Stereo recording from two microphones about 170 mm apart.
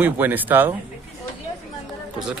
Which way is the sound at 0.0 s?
10° right (ahead or behind).